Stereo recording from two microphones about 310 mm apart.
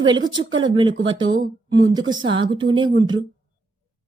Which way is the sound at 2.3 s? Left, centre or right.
Centre.